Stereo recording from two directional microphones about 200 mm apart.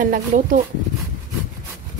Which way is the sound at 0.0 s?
45° right (ahead or behind).